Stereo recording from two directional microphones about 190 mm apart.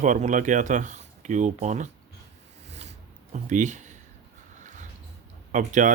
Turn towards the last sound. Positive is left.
turn(degrees=-40)  # may be behind; listen again after turning